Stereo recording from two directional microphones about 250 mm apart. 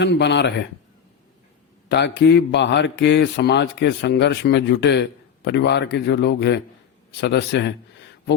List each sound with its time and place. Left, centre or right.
0.0 s a man's voice: left
1.9 s a man's voice: left